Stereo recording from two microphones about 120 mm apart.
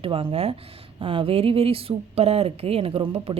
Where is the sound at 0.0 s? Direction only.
50° right (ahead or behind).